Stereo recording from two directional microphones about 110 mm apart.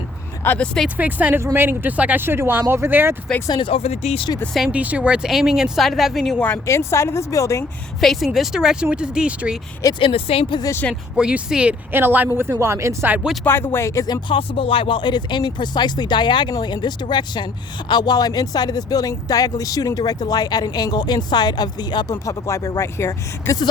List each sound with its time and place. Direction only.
0.4 s speech: 15° left (ahead or behind)
0.9 s speech: 15° right (ahead or behind)
3.6 s speech: 60° left (ahead or behind)
4.5 s speech: 10° right (ahead or behind)
6.4 s speech: 20° left (ahead or behind)
8.0 s speech: centre (ahead or behind)
10.0 s speech: 55° left (ahead or behind)
11.2 s speech: 10° right (ahead or behind)
13.4 s speech: 20° left (ahead or behind); by 14.3 s 35° left (ahead or behind)
14.3 s speech: 55° left (ahead or behind)
22.4 s speech: 25° left (ahead or behind)